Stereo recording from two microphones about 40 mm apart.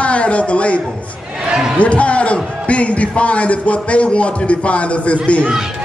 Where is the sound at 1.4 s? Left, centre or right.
Centre.